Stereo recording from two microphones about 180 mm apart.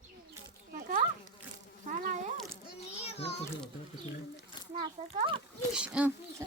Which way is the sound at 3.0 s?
35° left (ahead or behind).